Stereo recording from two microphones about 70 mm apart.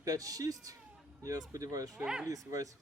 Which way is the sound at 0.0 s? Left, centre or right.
Right.